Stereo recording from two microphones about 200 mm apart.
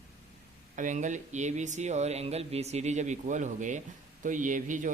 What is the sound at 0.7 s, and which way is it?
Speech, 40° right (ahead or behind).